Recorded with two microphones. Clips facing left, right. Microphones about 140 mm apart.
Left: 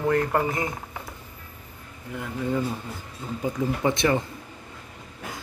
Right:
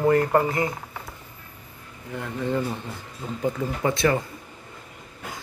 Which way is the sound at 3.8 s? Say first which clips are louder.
Right 1 dB; 20° left (ahead or behind).